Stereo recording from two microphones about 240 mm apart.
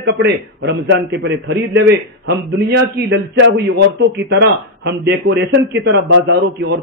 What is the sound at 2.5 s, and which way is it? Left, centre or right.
A man's voice, right.